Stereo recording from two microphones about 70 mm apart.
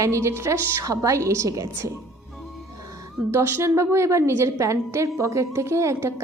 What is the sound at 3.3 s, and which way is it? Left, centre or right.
A woman's voice, right.